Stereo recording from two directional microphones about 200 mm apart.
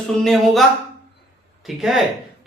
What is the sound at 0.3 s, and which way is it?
A man's voice, centre (ahead or behind).